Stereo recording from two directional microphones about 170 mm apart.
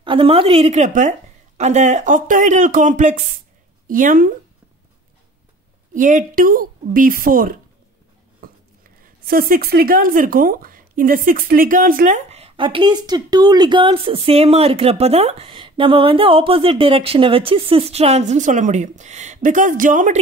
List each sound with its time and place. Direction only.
0.0 s speech: 30° right (ahead or behind); by 4.3 s 55° right (ahead or behind)
5.9 s speech: 50° right (ahead or behind)
8.4 s a sound: 55° right (ahead or behind)
9.0 s speech: 60° right (ahead or behind)
12.3 s speech: 35° right (ahead or behind)